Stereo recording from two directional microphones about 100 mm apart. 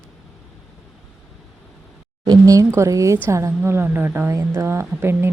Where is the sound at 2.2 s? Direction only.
35° right (ahead or behind).